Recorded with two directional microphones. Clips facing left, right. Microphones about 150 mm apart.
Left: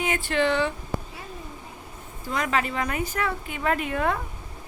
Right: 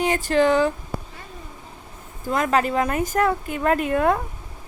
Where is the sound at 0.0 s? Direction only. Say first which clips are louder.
Right 5 dB; 40° right (ahead or behind).